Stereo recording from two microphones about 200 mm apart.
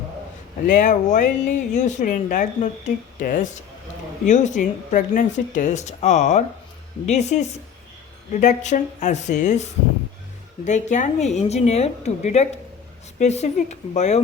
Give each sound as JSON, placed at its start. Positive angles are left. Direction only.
{"t": 0.7, "sound": "speech", "side_deg": 40}